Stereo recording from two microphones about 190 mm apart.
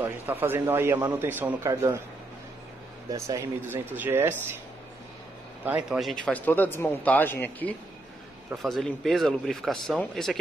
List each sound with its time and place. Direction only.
0.0 s a man's voice: 10° right (ahead or behind)
3.1 s a man's voice: 15° right (ahead or behind)
5.7 s speech: 5° right (ahead or behind)